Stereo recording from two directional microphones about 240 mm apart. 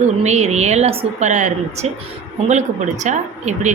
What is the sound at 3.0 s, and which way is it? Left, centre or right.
Speech, right.